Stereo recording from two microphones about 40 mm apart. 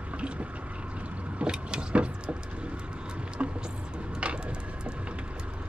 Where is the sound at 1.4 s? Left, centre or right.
Right.